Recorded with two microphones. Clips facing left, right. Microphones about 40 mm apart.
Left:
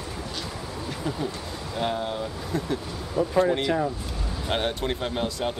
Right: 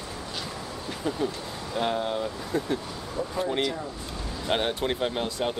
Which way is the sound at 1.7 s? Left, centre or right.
Centre.